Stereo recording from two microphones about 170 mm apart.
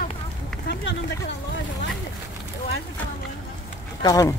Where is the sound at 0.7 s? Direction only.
90° left.